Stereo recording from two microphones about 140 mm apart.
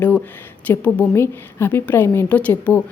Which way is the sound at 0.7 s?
10° left (ahead or behind).